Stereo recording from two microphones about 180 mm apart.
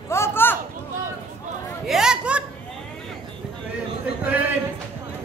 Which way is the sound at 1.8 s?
5° right (ahead or behind).